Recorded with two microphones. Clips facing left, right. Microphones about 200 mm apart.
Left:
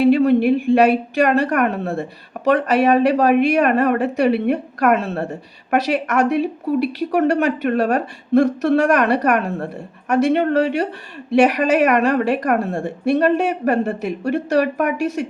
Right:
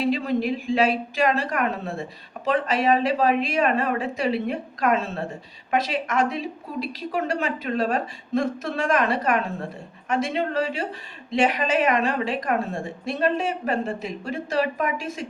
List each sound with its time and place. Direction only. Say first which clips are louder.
0.0 s a woman's voice: left 10 dB; 65° left (ahead or behind)